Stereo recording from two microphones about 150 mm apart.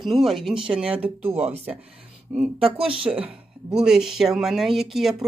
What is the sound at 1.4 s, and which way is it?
Speech, 45° right (ahead or behind).